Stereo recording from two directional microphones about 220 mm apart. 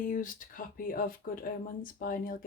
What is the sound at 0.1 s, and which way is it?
Speech, 35° left (ahead or behind).